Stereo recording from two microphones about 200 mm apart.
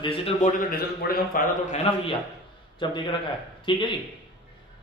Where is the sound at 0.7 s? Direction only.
50° left (ahead or behind).